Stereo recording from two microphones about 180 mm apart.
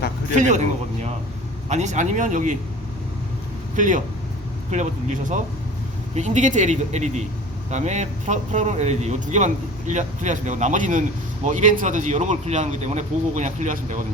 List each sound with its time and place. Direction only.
0.3 s speech: 40° right (ahead or behind)
1.7 s speech: 40° right (ahead or behind)
3.8 s speech: 45° right (ahead or behind)